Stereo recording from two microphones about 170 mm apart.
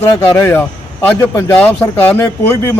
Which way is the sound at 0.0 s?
20° left (ahead or behind).